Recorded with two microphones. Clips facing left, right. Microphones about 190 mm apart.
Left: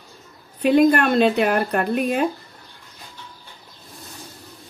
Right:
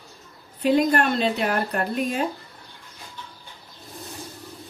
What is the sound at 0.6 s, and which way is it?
Speech, 60° left (ahead or behind).